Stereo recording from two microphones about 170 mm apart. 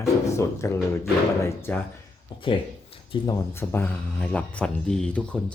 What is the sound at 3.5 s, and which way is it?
Speech, 15° left (ahead or behind).